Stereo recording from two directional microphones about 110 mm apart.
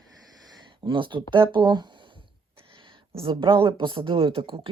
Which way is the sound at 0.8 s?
50° right (ahead or behind).